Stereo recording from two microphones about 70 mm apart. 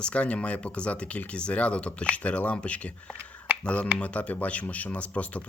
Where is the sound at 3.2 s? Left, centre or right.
Centre.